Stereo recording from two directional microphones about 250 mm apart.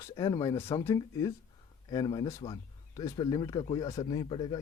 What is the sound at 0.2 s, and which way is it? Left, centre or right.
Speech, centre.